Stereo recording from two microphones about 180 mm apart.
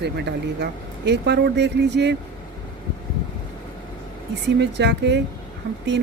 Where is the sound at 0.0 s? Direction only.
70° right (ahead or behind).